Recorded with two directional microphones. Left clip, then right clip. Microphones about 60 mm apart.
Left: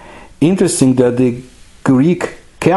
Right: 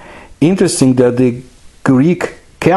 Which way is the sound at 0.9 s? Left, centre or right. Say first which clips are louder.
Right 1 dB; right.